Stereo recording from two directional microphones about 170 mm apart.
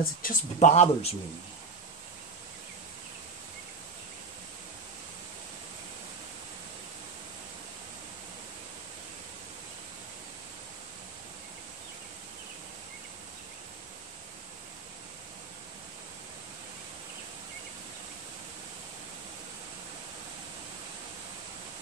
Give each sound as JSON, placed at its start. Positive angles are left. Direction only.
{"t": 0.0, "sound": "speech", "side_deg": 55}